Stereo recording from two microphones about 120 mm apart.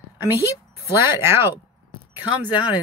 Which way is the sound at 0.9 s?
20° right (ahead or behind).